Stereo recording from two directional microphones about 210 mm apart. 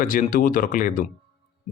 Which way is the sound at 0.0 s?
40° left (ahead or behind).